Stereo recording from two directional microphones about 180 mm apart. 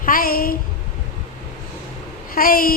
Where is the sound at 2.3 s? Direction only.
55° left (ahead or behind).